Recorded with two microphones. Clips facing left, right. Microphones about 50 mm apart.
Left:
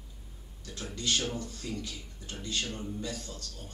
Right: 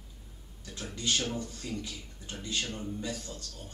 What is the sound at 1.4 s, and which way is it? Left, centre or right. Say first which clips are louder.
Speech: even; centre.